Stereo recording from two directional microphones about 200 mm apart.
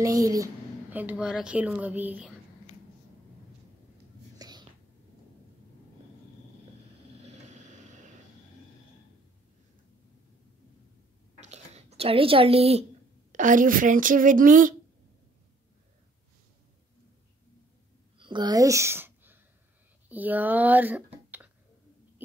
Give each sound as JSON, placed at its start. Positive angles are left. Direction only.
{"t": 0.0, "sound": "a woman's voice", "side_deg": -15}
{"t": 4.4, "sound": "whispering", "side_deg": -20}
{"t": 7.4, "sound": "vehicle", "side_deg": -35}
{"t": 11.3, "sound": "a sound", "side_deg": -35}
{"t": 13.3, "sound": "speech", "side_deg": -40}
{"t": 18.2, "sound": "a sound", "side_deg": -20}
{"t": 20.1, "sound": "speech", "side_deg": -10}